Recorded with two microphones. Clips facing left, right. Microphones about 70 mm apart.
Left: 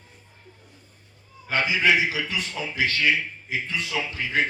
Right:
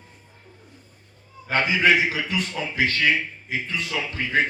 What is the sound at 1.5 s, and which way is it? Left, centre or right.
A man's voice, right.